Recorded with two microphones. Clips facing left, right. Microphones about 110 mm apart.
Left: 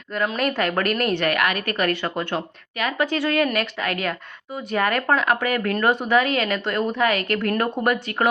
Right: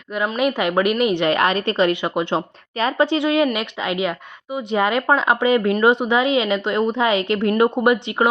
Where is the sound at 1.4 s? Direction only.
30° right (ahead or behind).